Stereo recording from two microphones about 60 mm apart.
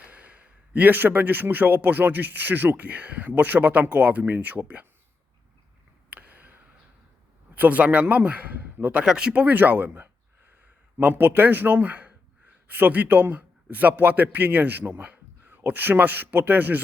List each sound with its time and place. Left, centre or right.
0.0 s a man's voice: right
6.1 s a sound: right
7.5 s a man's voice: right
9.0 s a man's voice: centre; by 16.8 s right